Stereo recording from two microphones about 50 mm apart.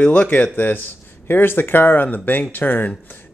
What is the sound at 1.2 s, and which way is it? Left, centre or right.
Speech, left.